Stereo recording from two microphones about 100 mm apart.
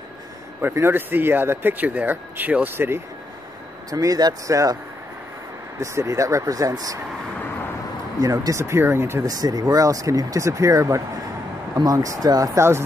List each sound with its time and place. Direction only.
0.6 s speech: 25° right (ahead or behind)
3.9 s speech: 35° right (ahead or behind)
5.8 s speech: 30° right (ahead or behind)
8.2 s speech: 35° right (ahead or behind)
9.2 s speech: 40° right (ahead or behind)